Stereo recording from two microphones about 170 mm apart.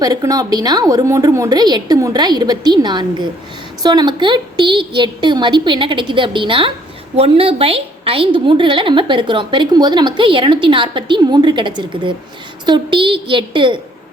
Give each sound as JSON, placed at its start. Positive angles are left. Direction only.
{"t": 0.0, "sound": "a woman's voice", "side_deg": -20}